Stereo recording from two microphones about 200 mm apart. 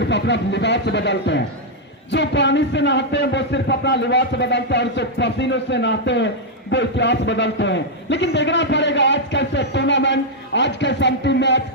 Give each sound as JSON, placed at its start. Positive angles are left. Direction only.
{"t": 0.0, "sound": "speech", "side_deg": 60}